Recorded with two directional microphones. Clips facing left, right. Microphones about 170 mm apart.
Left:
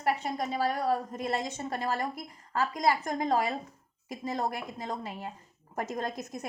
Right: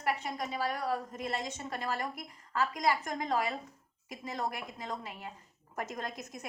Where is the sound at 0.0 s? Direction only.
30° left (ahead or behind).